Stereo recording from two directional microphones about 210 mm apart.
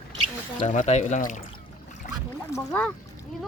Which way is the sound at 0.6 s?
35° left (ahead or behind).